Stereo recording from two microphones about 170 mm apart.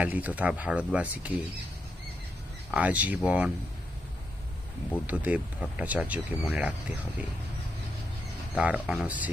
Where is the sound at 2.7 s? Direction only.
10° right (ahead or behind).